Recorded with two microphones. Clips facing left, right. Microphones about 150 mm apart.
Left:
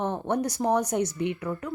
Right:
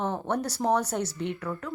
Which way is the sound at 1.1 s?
60° left (ahead or behind).